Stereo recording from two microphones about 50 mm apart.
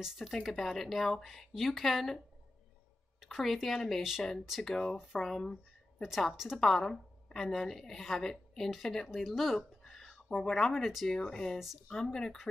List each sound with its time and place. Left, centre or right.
0.0 s speech: centre
0.3 s a woman's voice: centre
6.0 s a woman's voice: centre
6.6 s a woman's voice: centre
9.6 s a sound: centre
11.1 s speech: centre
11.5 s a woman's voice: centre
11.9 s speech: centre